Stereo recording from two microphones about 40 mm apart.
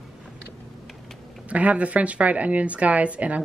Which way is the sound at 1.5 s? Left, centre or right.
Right.